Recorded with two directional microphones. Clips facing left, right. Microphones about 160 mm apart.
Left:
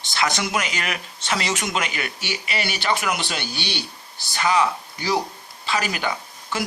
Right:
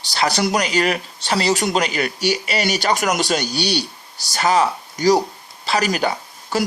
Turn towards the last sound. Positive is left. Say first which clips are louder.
# right 5 dB
turn(degrees=-40)  # may be behind; listen again after turning